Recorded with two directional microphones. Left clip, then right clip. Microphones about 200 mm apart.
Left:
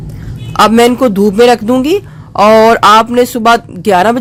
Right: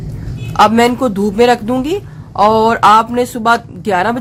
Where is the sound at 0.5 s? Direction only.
35° left (ahead or behind).